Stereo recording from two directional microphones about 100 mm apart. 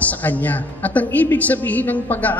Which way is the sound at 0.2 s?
15° left (ahead or behind).